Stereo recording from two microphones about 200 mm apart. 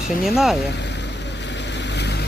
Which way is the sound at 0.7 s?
60° left (ahead or behind).